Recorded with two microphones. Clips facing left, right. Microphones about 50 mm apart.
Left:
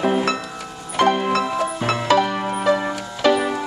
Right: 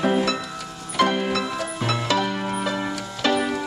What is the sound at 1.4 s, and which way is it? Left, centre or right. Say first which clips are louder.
Music: left 5 dB; left.